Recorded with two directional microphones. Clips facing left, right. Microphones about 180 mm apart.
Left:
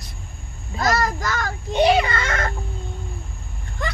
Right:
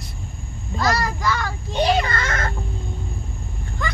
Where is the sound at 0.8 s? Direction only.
45° left (ahead or behind).